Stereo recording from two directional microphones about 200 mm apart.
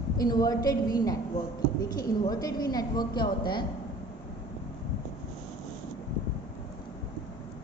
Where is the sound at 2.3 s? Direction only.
20° left (ahead or behind).